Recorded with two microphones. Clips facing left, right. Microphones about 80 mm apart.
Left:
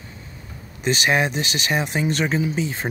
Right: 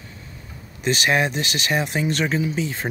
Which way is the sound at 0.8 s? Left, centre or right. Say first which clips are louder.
Even; centre.